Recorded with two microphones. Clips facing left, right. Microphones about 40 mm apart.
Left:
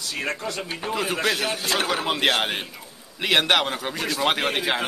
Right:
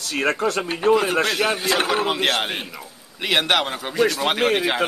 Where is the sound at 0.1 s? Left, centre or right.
Right.